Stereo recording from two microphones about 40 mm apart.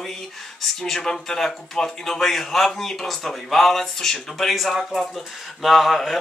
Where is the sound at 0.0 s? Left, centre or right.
Centre.